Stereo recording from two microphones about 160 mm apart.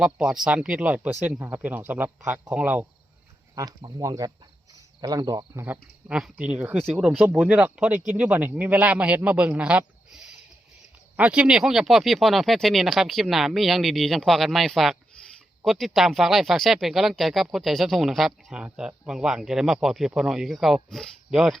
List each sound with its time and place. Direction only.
0.0 s speech: 5° right (ahead or behind)
3.5 s speech: 25° right (ahead or behind)
6.1 s speech: 5° right (ahead or behind)